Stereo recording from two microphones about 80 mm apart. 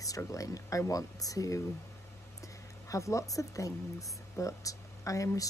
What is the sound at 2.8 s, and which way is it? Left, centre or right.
Speech, left.